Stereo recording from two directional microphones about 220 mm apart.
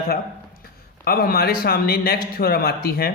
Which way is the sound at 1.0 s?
40° left (ahead or behind).